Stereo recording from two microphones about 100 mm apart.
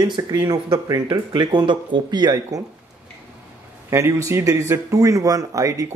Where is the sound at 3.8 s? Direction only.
30° right (ahead or behind).